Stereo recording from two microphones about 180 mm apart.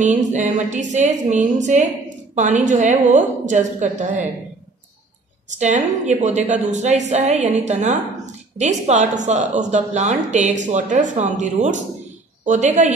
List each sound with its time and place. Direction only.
0.0 s a woman's voice: 40° right (ahead or behind)
6.0 s a woman's voice: 40° right (ahead or behind)